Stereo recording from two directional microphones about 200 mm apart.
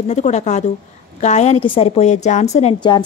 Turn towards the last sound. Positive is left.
turn(degrees=20)  # may be behind; listen again after turning